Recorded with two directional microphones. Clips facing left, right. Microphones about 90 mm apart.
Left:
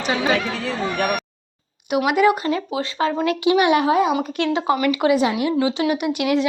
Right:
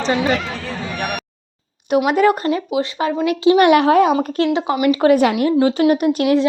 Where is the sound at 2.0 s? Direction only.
40° right (ahead or behind).